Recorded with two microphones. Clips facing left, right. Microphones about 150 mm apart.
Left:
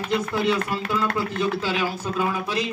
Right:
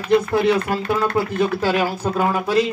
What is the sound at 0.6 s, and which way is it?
Speech, 50° right (ahead or behind).